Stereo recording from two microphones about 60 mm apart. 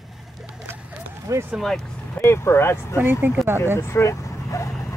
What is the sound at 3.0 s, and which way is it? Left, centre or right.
Speech, right.